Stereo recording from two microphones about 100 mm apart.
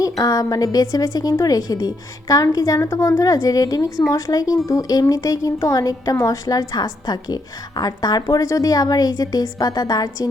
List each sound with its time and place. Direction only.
0.0 s a woman's voice: 40° left (ahead or behind)